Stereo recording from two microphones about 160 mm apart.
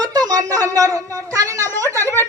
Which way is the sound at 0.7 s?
20° right (ahead or behind).